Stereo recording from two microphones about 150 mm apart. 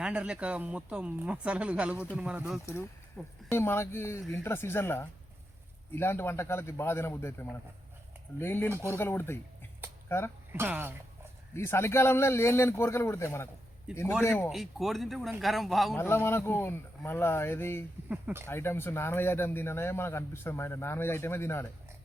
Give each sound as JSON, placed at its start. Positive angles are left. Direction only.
{"t": 0.0, "sound": "a man's voice", "side_deg": -5}
{"t": 3.5, "sound": "speech", "side_deg": 15}
{"t": 10.5, "sound": "speech", "side_deg": -15}
{"t": 11.5, "sound": "speech", "side_deg": 15}
{"t": 14.5, "sound": "a man's voice", "side_deg": 0}
{"t": 16.0, "sound": "speech", "side_deg": 15}
{"t": 18.1, "sound": "speech", "side_deg": -10}
{"t": 18.4, "sound": "speech", "side_deg": 15}